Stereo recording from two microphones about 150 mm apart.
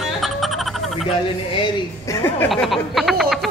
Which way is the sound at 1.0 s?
35° left (ahead or behind).